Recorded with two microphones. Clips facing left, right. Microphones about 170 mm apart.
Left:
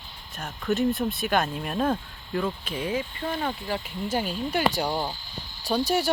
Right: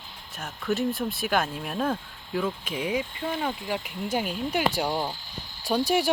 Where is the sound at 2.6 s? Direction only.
10° right (ahead or behind).